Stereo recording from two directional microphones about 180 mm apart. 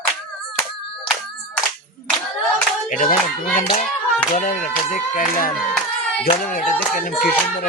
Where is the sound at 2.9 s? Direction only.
50° left (ahead or behind).